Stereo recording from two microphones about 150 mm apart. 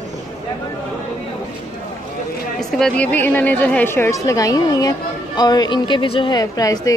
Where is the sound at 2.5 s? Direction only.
5° left (ahead or behind).